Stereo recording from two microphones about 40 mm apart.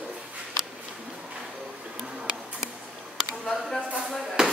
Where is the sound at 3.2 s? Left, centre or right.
Centre.